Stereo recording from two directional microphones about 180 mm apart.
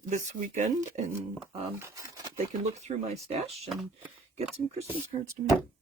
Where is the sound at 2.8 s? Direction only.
35° right (ahead or behind).